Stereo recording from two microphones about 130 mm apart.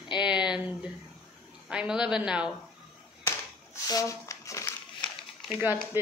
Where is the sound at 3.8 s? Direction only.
25° left (ahead or behind).